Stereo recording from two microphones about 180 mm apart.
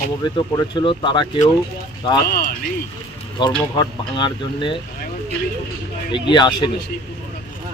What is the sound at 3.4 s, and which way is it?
Speech, 25° left (ahead or behind).